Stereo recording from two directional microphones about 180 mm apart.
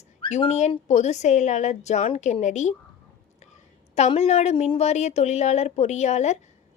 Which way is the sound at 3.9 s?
35° left (ahead or behind).